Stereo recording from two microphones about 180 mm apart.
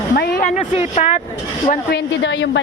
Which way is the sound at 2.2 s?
85° left.